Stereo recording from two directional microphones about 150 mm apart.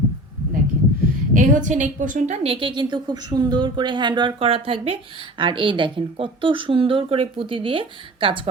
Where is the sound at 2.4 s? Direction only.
35° right (ahead or behind).